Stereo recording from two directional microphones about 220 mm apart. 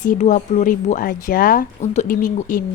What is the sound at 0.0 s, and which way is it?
A woman's voice, 35° left (ahead or behind).